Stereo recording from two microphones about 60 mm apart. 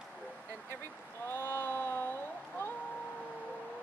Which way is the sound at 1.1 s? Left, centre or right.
Left.